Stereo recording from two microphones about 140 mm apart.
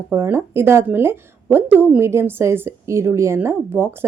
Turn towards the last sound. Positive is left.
turn(degrees=-15)  # may be behind; listen again after turning